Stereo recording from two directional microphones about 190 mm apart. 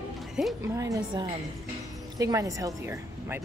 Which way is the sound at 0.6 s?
15° right (ahead or behind).